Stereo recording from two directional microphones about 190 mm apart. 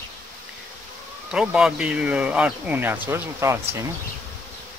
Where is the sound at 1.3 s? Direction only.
5° right (ahead or behind).